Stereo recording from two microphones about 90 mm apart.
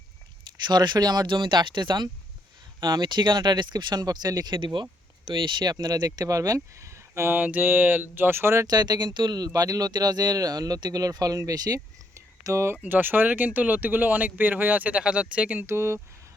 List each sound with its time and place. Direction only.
0.7 s speech: 55° right (ahead or behind)
5.7 s speech: 45° right (ahead or behind); by 8.6 s 30° right (ahead or behind)
8.6 s speech: 50° right (ahead or behind); by 15.6 s 15° right (ahead or behind)
15.6 s speech: 30° right (ahead or behind)